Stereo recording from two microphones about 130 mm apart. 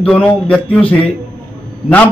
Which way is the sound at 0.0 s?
10° left (ahead or behind).